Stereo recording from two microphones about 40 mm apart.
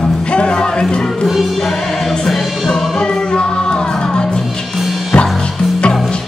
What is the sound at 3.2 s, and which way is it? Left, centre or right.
Music, left.